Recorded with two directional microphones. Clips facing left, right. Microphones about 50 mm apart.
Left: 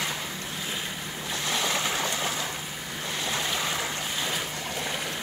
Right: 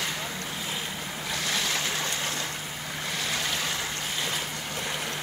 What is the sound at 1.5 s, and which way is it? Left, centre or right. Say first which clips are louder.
Vehicle: left 3 dB; centre.